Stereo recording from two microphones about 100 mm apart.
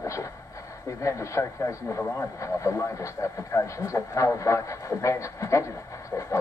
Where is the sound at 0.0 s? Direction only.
30° left (ahead or behind).